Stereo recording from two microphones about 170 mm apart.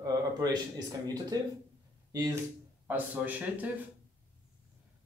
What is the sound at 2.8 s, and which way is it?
Speech, 10° right (ahead or behind).